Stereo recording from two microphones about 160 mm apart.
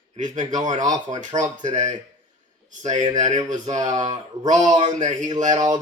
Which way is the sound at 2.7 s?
50° right (ahead or behind).